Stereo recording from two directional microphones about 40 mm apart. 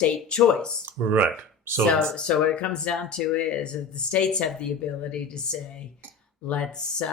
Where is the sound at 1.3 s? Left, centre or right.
Right.